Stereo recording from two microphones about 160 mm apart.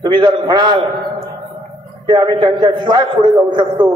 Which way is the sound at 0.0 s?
25° right (ahead or behind).